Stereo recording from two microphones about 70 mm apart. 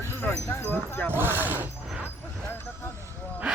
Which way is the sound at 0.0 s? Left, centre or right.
Left.